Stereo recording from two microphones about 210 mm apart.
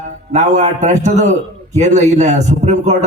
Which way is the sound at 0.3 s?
35° right (ahead or behind).